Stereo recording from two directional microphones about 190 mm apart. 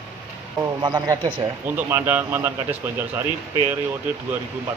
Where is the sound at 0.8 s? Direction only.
20° right (ahead or behind).